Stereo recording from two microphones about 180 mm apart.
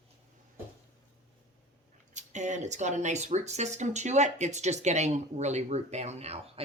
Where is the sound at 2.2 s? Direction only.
40° right (ahead or behind).